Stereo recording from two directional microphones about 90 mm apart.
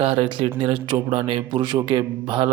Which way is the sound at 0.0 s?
80° right.